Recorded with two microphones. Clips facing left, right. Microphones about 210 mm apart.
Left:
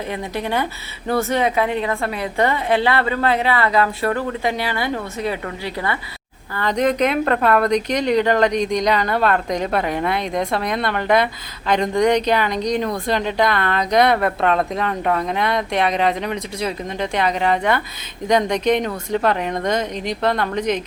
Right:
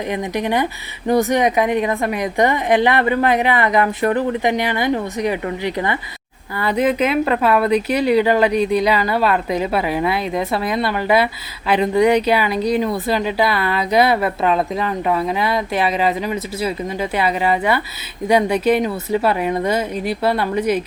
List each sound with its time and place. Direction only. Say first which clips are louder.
0.1 s speech: right 4 dB; 15° right (ahead or behind)
6.6 s speech: right 1 dB; 5° right (ahead or behind)